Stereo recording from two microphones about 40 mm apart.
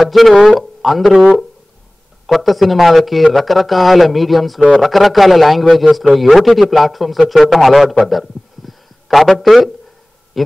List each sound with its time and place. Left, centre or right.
0.0 s a man's voice: centre
2.2 s a man's voice: centre
8.0 s a sound: centre